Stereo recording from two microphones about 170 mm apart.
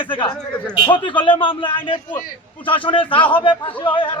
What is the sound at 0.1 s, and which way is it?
A man's voice, 30° left (ahead or behind).